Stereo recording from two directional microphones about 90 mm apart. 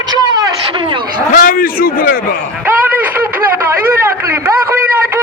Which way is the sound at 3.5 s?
30° right (ahead or behind).